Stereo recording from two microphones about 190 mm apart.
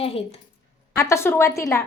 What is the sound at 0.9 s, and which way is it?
Speech, 15° left (ahead or behind).